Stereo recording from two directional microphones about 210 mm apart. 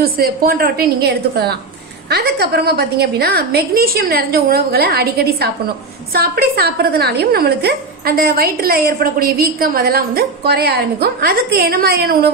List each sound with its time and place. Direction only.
0.0 s a woman's voice: 45° right (ahead or behind)